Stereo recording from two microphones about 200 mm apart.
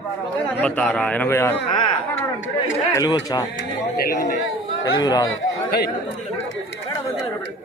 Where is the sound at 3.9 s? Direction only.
50° left (ahead or behind).